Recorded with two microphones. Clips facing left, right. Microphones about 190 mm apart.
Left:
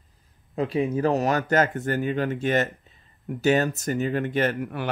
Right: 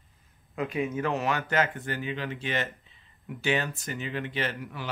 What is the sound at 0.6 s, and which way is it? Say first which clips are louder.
Speech: left 6 dB; 35° left (ahead or behind).